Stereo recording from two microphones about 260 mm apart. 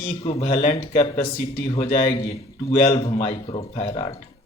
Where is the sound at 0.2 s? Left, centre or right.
Left.